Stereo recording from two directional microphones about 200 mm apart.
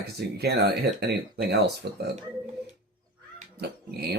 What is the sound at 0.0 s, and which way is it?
Speech, 55° right (ahead or behind).